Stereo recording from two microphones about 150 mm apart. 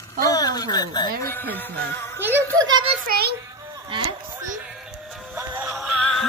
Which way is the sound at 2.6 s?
30° right (ahead or behind).